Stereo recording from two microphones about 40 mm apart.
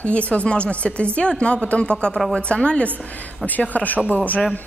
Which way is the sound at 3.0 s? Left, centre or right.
Left.